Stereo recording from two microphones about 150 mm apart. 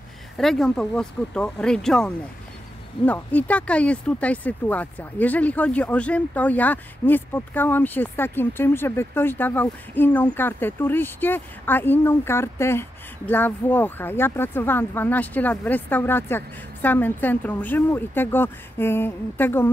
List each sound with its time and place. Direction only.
0.4 s speech: centre (ahead or behind)